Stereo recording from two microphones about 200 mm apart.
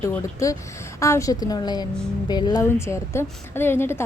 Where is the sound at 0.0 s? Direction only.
15° left (ahead or behind).